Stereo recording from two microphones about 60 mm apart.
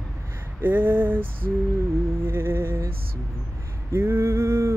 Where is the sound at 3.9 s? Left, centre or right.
Right.